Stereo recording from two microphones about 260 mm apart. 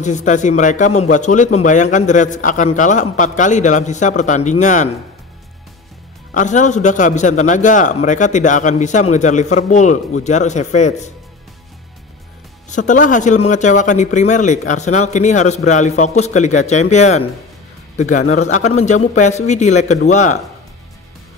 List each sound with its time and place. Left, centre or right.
0.0 s a man's voice: left
6.3 s a man's voice: left
12.6 s a man's voice: left